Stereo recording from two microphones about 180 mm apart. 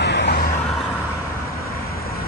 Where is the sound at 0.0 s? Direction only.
70° left (ahead or behind).